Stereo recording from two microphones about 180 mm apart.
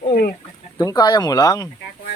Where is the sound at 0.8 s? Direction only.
20° left (ahead or behind).